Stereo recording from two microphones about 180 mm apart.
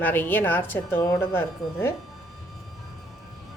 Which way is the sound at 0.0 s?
10° left (ahead or behind).